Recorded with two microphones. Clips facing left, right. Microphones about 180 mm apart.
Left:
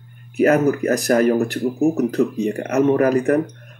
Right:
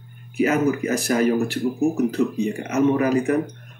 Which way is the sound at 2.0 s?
40° left (ahead or behind).